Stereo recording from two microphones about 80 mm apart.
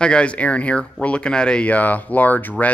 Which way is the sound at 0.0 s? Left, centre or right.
Centre.